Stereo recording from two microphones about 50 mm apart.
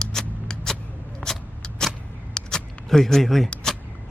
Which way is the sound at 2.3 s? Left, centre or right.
Centre.